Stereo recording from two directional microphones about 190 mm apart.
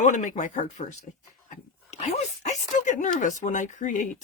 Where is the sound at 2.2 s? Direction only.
35° left (ahead or behind).